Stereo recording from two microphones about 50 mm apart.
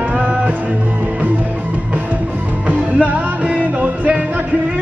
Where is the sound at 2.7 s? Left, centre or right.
Right.